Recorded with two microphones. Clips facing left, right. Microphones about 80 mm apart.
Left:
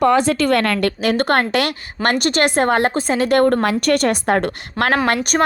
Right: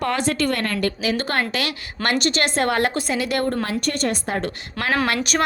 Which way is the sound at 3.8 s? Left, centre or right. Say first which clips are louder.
Left 7 dB; left.